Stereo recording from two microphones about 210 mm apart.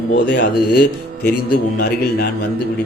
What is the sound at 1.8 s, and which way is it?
Speech, 50° left (ahead or behind).